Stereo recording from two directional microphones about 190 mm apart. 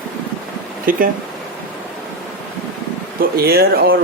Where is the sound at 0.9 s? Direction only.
45° right (ahead or behind).